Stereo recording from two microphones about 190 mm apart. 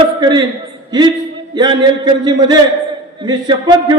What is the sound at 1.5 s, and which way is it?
A man's voice, 25° right (ahead or behind).